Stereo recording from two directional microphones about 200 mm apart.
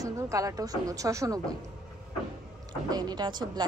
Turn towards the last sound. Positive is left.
turn(degrees=-20)  # may be behind; listen again after turning